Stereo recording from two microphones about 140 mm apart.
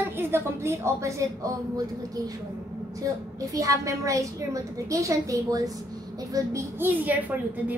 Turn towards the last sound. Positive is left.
turn(degrees=-10)  # may be behind; listen again after turning